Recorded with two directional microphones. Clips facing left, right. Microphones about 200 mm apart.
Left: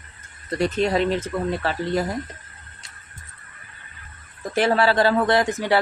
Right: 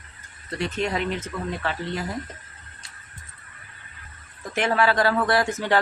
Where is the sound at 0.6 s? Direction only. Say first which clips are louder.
Left 6 dB; 35° left (ahead or behind).